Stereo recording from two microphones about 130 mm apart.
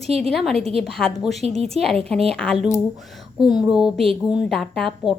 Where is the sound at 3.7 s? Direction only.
5° right (ahead or behind).